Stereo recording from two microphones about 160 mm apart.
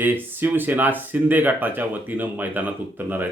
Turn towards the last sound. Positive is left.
turn(degrees=-10)  # may be behind; listen again after turning